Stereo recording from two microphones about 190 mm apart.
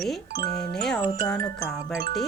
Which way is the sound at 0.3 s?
55° right (ahead or behind).